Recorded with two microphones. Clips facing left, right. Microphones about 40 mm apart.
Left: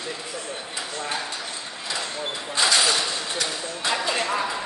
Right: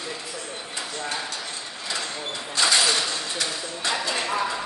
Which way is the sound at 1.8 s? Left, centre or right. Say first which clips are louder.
Even; centre.